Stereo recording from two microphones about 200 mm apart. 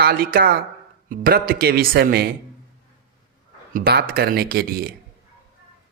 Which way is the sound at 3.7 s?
50° right (ahead or behind).